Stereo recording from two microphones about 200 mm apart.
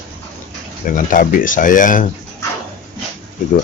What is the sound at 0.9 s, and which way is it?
Speech, 40° left (ahead or behind).